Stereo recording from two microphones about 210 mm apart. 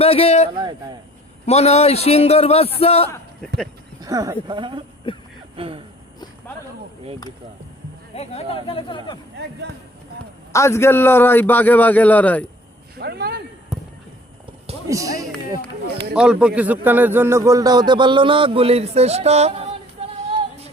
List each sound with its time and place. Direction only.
0.0 s a man's voice: 30° left (ahead or behind)
0.5 s a man's voice: 20° right (ahead or behind)
1.5 s a man's voice: 30° left (ahead or behind)
4.0 s a man's voice: 15° right (ahead or behind)
5.1 s speech: 25° left (ahead or behind)
5.5 s a man's voice: 25° right (ahead or behind)
8.1 s a man's voice: 30° left (ahead or behind)
9.3 s speech: 55° right (ahead or behind)
10.5 s a man's voice: 15° left (ahead or behind)
13.0 s a sound: 50° right (ahead or behind)
14.8 s speech: 15° right (ahead or behind)
15.9 s speech: 50° right (ahead or behind)
16.1 s a man's voice: 5° right (ahead or behind); by 19.6 s 30° right (ahead or behind)